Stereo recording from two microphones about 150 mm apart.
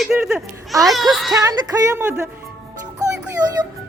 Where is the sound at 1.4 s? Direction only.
20° right (ahead or behind).